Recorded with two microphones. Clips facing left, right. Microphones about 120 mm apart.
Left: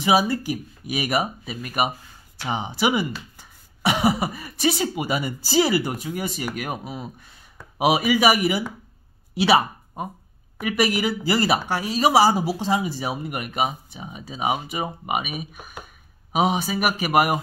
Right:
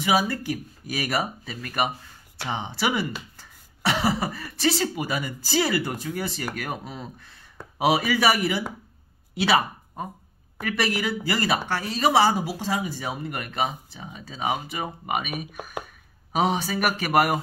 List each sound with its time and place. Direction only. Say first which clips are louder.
0.0 s speech: left 3 dB; 20° left (ahead or behind)
10.6 s speech: left 4 dB; 15° left (ahead or behind)